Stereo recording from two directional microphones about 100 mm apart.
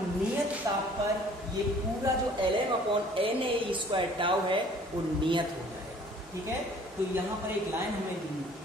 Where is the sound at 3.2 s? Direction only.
60° right (ahead or behind).